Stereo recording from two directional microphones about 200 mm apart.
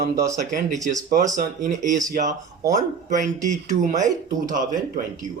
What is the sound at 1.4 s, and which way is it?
A man's voice, 40° right (ahead or behind).